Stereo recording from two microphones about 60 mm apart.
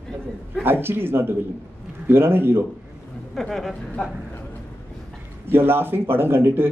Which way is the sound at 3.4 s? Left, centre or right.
Centre.